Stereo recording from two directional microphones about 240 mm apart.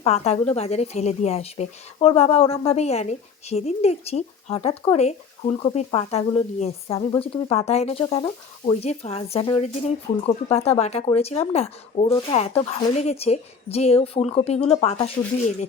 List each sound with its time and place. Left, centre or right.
0.0 s speech: left